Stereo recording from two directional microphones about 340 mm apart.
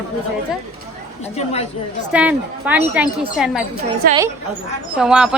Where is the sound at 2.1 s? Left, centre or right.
Centre.